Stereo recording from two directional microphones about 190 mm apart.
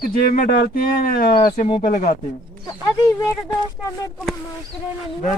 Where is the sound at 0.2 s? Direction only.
50° left (ahead or behind).